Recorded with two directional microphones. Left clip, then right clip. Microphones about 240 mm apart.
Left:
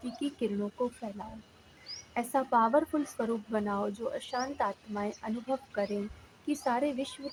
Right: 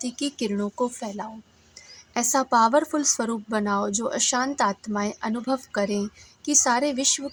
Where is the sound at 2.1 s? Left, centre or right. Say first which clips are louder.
Right 7 dB; right.